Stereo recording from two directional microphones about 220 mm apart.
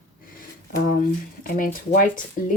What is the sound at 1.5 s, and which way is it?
Speech, 40° left (ahead or behind).